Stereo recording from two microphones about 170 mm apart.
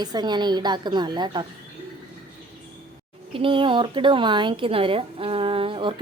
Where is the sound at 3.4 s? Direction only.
30° right (ahead or behind).